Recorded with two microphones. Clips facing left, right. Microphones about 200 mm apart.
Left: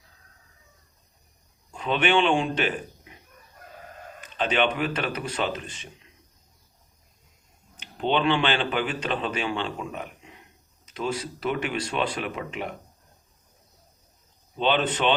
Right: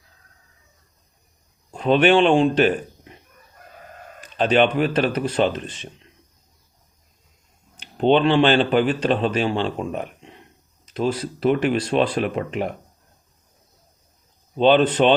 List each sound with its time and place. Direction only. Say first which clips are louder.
1.7 s speech: right 7 dB; 40° right (ahead or behind)
4.4 s speech: right 7 dB; 35° right (ahead or behind)
7.9 s speech: right 7 dB; 40° right (ahead or behind)
14.6 s speech: right 8 dB; 35° right (ahead or behind)